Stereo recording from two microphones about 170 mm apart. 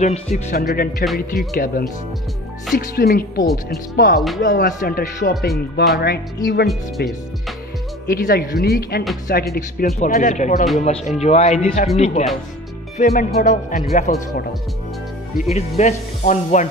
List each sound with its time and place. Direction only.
0.0 s speech: 45° left (ahead or behind)
0.6 s speech: 65° left (ahead or behind)
4.5 s speech: 50° left (ahead or behind); by 7.1 s 70° left (ahead or behind)
8.1 s speech: 55° left (ahead or behind)
9.9 s speech: 45° left (ahead or behind)
15.5 s speech: 45° left (ahead or behind)